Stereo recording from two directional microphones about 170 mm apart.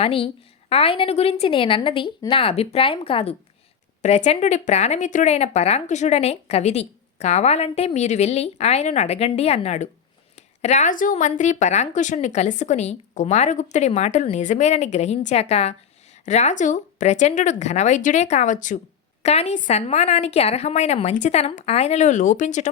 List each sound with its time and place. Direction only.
0.0 s a woman's voice: 35° left (ahead or behind)